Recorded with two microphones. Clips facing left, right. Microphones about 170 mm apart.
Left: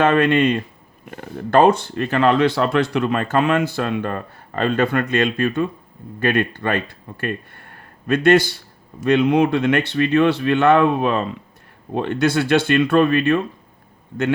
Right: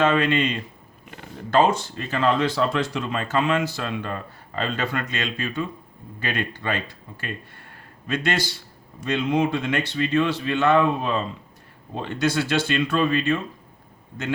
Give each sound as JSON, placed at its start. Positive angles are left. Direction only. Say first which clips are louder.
{"t": 0.0, "sound": "speech", "louder": "left 5 dB", "side_deg": 55}